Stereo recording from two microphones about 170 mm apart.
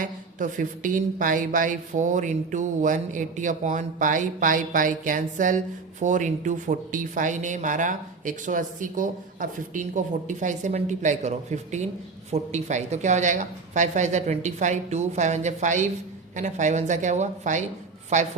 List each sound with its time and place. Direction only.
0.0 s speech: 50° right (ahead or behind)